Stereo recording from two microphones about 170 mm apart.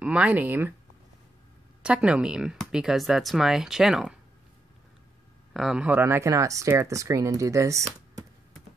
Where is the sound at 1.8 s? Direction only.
5° right (ahead or behind).